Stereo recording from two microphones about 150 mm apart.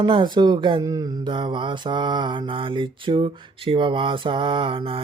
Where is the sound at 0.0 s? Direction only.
30° right (ahead or behind).